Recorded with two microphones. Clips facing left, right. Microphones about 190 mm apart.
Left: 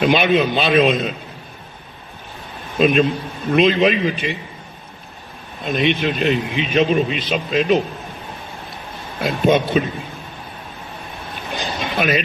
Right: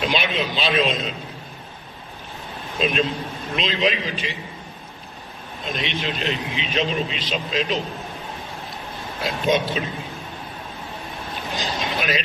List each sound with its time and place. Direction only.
0.0 s a man's voice: 55° left (ahead or behind)
2.8 s a man's voice: 55° left (ahead or behind)
5.7 s a man's voice: 55° left (ahead or behind)
9.2 s a man's voice: 55° left (ahead or behind)
11.5 s a sound: 55° left (ahead or behind)